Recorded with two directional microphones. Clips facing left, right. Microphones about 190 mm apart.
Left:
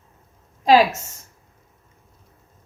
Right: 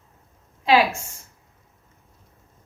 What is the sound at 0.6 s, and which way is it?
Speech, 40° left (ahead or behind).